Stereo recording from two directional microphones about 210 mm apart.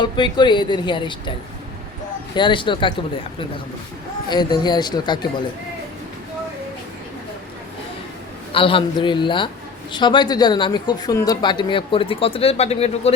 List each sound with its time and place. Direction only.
0.0 s speech: 20° left (ahead or behind)
2.3 s speech: 20° left (ahead or behind)
4.3 s speech: 20° left (ahead or behind)
8.5 s speech: 25° left (ahead or behind)